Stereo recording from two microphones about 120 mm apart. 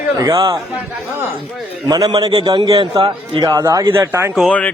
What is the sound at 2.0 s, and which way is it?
A man's voice, 40° right (ahead or behind).